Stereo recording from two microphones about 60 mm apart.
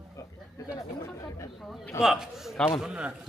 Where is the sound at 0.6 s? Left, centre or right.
Left.